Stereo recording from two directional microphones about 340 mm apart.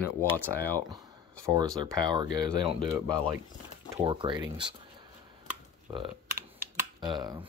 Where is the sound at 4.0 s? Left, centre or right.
Centre.